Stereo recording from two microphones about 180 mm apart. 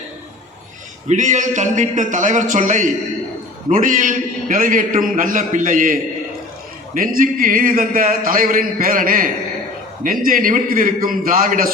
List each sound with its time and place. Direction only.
1.0 s a man's voice: 45° right (ahead or behind)